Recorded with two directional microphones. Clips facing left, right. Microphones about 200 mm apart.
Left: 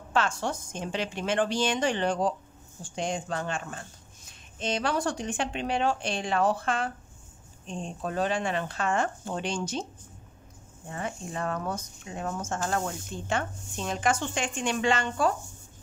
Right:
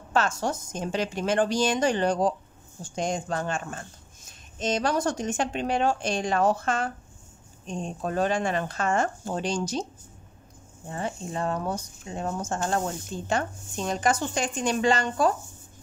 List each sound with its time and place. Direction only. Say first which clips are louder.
0.1 s speech: right 2 dB; 40° right (ahead or behind)
10.9 s speech: right 3 dB; 30° right (ahead or behind)